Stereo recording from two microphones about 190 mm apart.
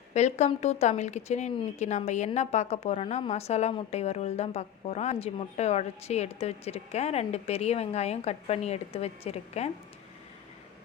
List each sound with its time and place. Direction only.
0.1 s speech: 35° left (ahead or behind)